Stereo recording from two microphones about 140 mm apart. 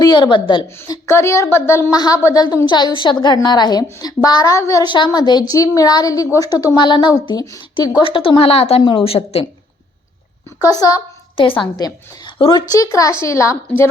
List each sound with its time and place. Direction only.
0.0 s a woman's voice: 30° left (ahead or behind)
0.8 s a woman's voice: 20° left (ahead or behind)
8.0 s a woman's voice: 40° left (ahead or behind)
10.6 s a woman's voice: 30° left (ahead or behind)